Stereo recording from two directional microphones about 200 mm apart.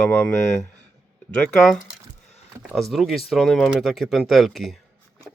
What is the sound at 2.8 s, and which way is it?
Speech, centre (ahead or behind).